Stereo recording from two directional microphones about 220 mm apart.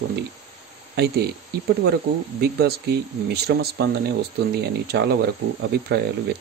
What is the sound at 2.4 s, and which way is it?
Speech, 45° right (ahead or behind).